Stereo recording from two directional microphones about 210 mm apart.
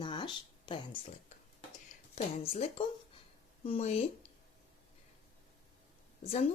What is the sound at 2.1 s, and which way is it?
Speech, 25° left (ahead or behind).